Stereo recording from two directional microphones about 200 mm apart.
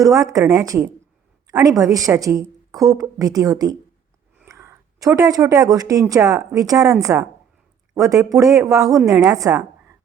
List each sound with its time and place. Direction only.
0.0 s a woman's voice: 15° right (ahead or behind)